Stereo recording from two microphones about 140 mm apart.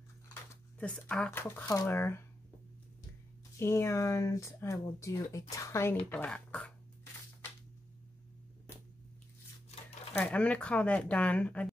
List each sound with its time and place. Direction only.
0.3 s speech: 10° left (ahead or behind)
3.5 s speech: 20° left (ahead or behind)
10.2 s speech: 10° left (ahead or behind)